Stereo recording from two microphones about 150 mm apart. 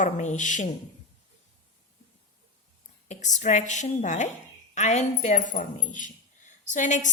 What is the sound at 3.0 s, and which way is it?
A woman's voice, 50° left (ahead or behind).